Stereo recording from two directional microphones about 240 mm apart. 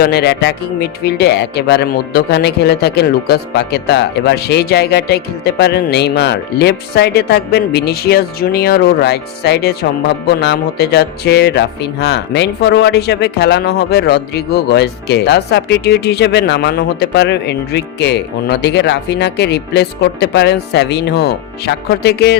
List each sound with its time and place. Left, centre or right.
0.0 s music: left